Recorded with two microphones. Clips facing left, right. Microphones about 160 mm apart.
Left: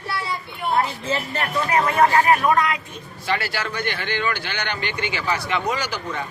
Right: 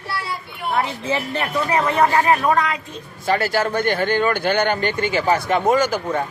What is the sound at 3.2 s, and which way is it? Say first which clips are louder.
Speech: right 6 dB; 45° right (ahead or behind).